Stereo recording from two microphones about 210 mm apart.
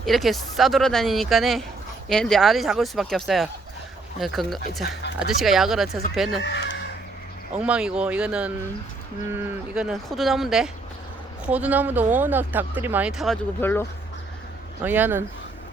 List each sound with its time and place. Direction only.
0.0 s speech: centre (ahead or behind)
6.4 s speech: 60° left (ahead or behind)
7.6 s speech: 5° right (ahead or behind)
14.8 s speech: 10° right (ahead or behind)